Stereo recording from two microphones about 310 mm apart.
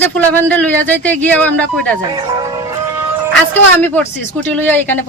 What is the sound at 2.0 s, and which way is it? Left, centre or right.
Speech, centre.